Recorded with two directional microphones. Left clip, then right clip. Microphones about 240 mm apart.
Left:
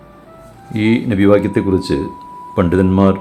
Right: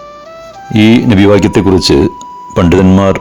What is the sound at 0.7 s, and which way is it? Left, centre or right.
Speech, right.